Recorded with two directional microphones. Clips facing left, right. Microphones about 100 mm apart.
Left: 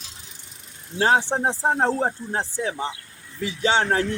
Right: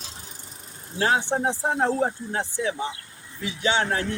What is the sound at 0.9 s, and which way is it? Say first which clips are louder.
Speech: left 3 dB; 30° left (ahead or behind).